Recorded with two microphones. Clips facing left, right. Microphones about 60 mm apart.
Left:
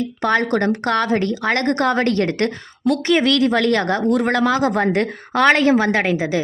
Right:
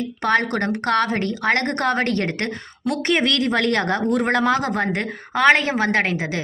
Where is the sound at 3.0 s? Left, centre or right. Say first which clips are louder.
Left 3 dB; right.